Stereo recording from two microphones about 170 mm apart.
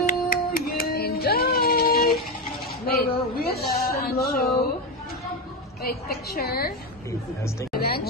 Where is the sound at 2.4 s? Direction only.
60° left (ahead or behind).